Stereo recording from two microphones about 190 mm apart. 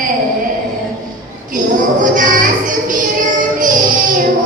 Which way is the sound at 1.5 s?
45° right (ahead or behind).